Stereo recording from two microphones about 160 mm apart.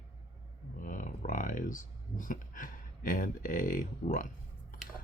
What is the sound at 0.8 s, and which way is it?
Speech, 55° left (ahead or behind).